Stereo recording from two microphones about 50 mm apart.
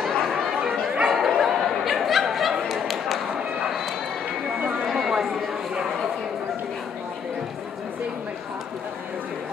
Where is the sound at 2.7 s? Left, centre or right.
Centre.